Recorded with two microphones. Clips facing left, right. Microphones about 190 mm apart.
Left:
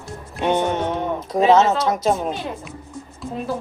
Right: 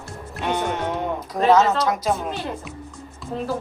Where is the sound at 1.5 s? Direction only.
25° left (ahead or behind).